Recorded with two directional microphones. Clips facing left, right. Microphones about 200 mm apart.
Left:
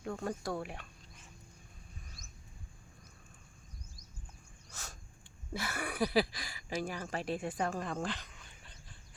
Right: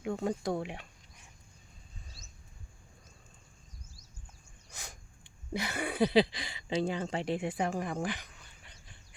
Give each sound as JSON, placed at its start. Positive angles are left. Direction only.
{"t": 0.0, "sound": "speech", "side_deg": -20}
{"t": 4.7, "sound": "a sound", "side_deg": -15}
{"t": 5.5, "sound": "speech", "side_deg": -20}